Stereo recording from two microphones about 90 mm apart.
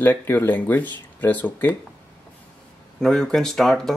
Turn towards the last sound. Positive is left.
turn(degrees=5)  # may be behind; listen again after turning